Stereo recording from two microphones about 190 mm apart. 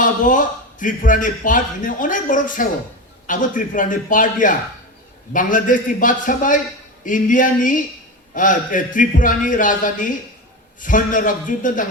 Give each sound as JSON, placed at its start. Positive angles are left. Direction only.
{"t": 0.0, "sound": "a man's voice", "side_deg": 45}